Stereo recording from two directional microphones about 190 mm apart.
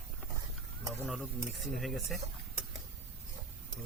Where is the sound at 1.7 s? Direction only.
Centre (ahead or behind).